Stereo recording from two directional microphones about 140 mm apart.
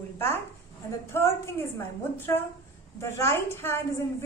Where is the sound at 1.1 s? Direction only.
15° left (ahead or behind).